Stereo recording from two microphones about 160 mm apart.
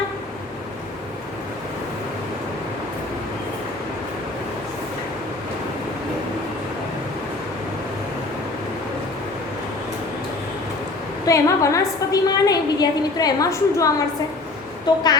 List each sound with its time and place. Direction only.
11.3 s a woman's voice: 20° left (ahead or behind)